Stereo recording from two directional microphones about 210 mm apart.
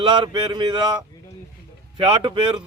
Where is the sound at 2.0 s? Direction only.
25° right (ahead or behind).